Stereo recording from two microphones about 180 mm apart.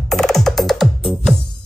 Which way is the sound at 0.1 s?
Centre (ahead or behind).